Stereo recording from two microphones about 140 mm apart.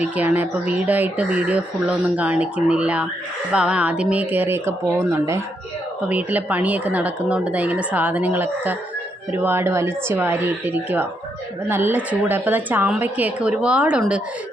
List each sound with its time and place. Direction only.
0.0 s speech: 10° right (ahead or behind)